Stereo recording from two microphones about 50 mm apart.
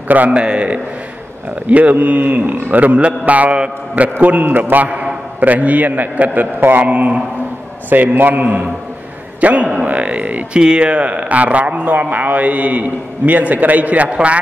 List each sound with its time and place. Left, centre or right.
0.1 s a man's voice: right
0.4 s a man's voice: right
4.8 s a man's voice: right